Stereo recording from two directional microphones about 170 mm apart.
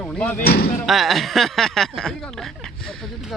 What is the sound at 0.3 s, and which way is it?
Speech, 65° left (ahead or behind).